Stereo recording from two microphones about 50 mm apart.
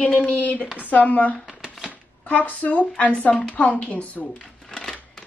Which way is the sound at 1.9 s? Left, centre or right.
Left.